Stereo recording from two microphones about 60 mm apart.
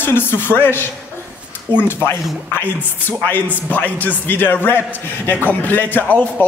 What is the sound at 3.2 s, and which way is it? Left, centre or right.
A man's voice, left.